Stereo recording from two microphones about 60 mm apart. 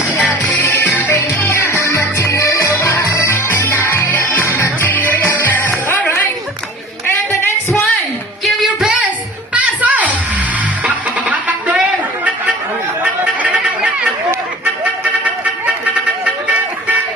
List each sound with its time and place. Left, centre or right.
0.7 s music: left
1.5 s music: left
7.4 s a sound: left
8.4 s child singing: centre
9.6 s music: right
13.0 s chatter: right